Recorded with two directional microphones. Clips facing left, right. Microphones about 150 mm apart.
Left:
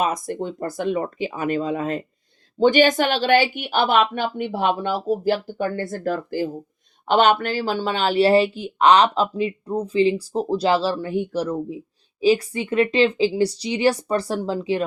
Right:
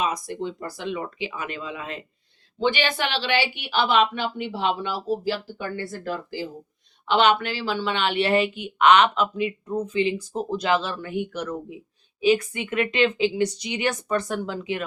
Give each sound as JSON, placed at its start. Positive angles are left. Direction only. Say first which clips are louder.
{"t": 0.0, "sound": "a woman's voice", "louder": "left 3 dB", "side_deg": 50}